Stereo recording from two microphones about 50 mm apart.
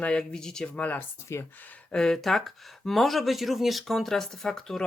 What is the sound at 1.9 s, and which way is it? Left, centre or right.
Speech, centre.